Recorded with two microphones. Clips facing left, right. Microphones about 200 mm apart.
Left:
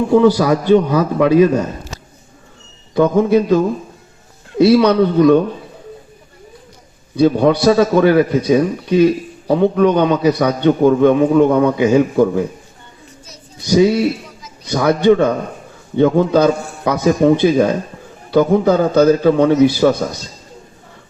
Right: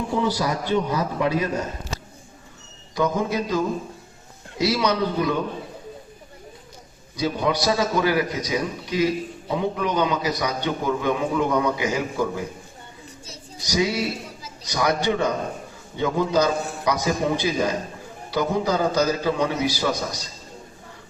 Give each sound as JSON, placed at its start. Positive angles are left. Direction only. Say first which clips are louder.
{"t": 0.3, "sound": "a man's voice", "louder": "left 12 dB", "side_deg": 65}
{"t": 2.9, "sound": "a man's voice", "louder": "left 11 dB", "side_deg": 55}
{"t": 7.2, "sound": "a man's voice", "louder": "left 11 dB", "side_deg": 60}
{"t": 13.7, "sound": "a man's voice", "louder": "left 11 dB", "side_deg": 55}